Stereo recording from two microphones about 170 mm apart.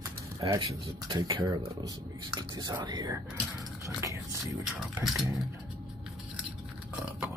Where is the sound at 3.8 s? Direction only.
20° right (ahead or behind).